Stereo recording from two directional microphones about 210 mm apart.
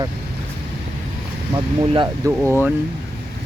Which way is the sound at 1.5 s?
20° right (ahead or behind).